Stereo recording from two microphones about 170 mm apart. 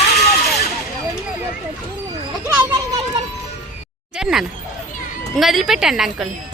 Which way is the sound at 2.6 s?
15° right (ahead or behind).